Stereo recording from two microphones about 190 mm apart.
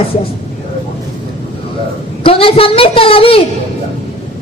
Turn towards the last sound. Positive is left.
turn(degrees=30)  # may be behind; listen again after turning